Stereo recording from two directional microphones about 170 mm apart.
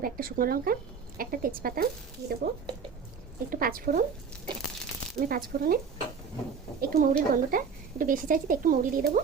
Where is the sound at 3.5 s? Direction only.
55° right (ahead or behind).